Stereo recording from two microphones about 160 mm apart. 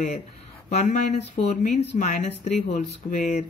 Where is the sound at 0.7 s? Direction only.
45° left (ahead or behind).